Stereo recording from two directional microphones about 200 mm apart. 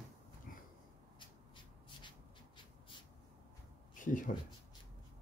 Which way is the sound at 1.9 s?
25° left (ahead or behind).